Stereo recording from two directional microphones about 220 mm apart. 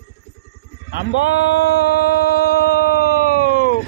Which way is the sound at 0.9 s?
55° left (ahead or behind).